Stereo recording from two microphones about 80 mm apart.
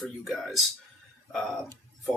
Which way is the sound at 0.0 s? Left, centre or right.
Centre.